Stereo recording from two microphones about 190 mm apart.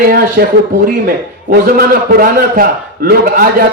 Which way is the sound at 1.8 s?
50° right (ahead or behind).